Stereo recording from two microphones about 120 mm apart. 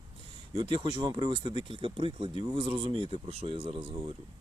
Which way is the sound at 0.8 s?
40° right (ahead or behind).